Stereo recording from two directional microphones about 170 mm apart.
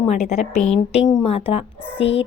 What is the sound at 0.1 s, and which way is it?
A woman's voice, 40° left (ahead or behind).